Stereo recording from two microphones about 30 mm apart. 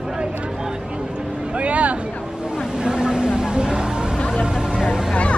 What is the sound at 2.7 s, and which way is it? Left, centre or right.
Vehicle, right.